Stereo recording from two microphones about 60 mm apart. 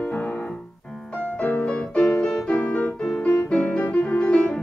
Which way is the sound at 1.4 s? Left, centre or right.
Left.